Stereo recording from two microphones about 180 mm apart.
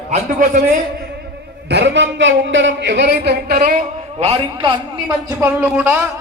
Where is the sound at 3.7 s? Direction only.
35° right (ahead or behind).